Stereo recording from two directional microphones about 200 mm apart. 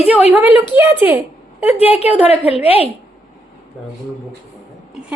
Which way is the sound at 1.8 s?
30° left (ahead or behind).